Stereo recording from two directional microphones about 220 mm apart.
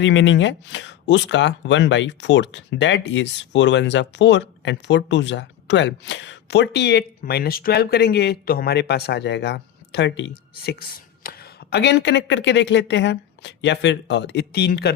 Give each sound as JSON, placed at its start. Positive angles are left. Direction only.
{"t": 0.0, "sound": "speech", "side_deg": 55}